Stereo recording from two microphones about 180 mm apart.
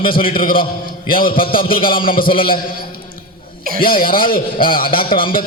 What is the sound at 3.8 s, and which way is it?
Speech, 55° left (ahead or behind).